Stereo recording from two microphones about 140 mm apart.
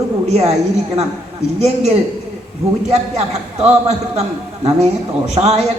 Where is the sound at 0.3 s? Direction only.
50° right (ahead or behind).